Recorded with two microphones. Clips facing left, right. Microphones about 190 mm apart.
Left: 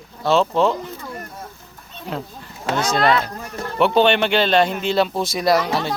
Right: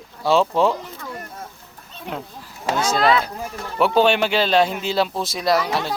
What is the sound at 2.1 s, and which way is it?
Speech, 5° right (ahead or behind).